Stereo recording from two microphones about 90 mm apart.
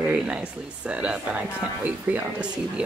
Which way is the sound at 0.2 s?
15° right (ahead or behind).